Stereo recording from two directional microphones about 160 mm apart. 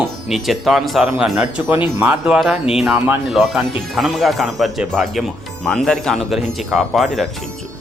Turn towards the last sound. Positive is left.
turn(degrees=0)  # may be behind; listen again after turning